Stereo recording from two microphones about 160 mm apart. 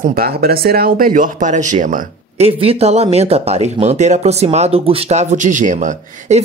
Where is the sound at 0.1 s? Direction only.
70° right (ahead or behind).